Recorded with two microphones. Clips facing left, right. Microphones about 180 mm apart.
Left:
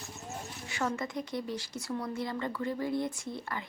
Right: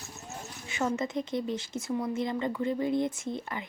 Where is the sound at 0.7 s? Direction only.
25° right (ahead or behind).